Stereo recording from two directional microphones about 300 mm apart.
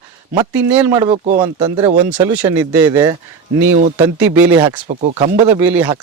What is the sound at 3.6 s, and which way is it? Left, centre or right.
Speech, right.